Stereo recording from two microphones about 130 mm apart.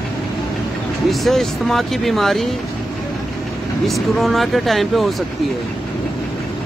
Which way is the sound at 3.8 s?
Centre (ahead or behind).